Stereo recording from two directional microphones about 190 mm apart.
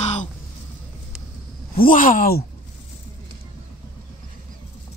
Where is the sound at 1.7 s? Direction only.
50° left (ahead or behind).